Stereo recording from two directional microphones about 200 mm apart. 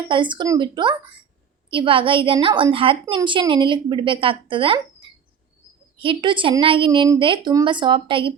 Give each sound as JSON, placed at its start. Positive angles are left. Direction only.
{"t": 0.1, "sound": "a woman's voice", "side_deg": -25}